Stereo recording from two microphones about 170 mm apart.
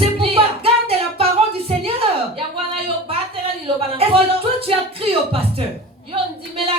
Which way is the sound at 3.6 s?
35° right (ahead or behind).